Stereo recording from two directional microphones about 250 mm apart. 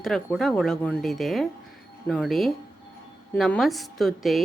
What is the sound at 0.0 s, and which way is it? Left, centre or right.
A woman's voice, centre.